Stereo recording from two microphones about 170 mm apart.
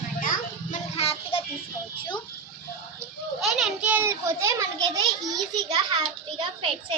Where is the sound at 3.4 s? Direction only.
Centre (ahead or behind); by 5.0 s 20° right (ahead or behind).